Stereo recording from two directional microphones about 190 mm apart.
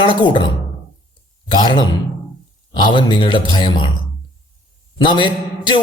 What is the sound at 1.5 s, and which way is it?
Speech, 25° left (ahead or behind).